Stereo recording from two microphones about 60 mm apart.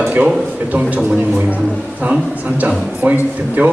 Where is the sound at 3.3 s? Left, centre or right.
Right.